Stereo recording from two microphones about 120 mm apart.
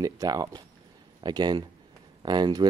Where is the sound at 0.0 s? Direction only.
30° right (ahead or behind).